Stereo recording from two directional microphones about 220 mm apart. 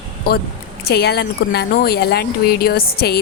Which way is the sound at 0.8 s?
45° left (ahead or behind).